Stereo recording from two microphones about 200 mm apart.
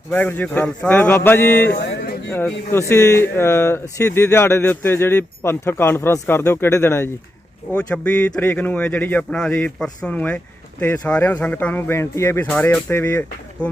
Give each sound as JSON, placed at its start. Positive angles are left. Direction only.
{"t": 0.1, "sound": "speech", "side_deg": 10}
{"t": 1.7, "sound": "a sound", "side_deg": 60}
{"t": 2.7, "sound": "speech", "side_deg": 15}